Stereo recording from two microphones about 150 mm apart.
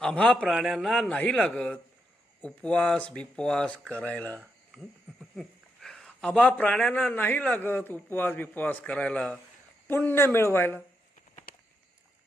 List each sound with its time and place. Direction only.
0.0 s a man's voice: 5° left (ahead or behind)
5.4 s speech: 5° left (ahead or behind)
11.5 s a sound: 70° left (ahead or behind)